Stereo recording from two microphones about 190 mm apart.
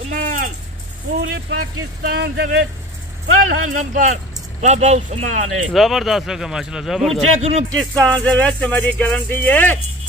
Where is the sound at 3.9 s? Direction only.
35° right (ahead or behind).